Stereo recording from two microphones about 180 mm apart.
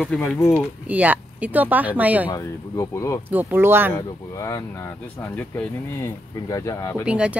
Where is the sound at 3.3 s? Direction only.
10° right (ahead or behind).